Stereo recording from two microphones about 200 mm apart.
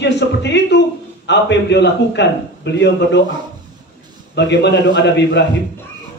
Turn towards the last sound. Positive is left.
turn(degrees=60)  # may be behind; listen again after turning